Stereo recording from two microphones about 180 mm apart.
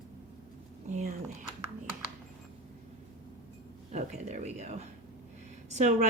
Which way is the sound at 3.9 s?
40° right (ahead or behind).